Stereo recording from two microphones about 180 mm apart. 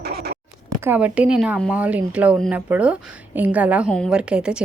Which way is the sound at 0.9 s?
10° right (ahead or behind).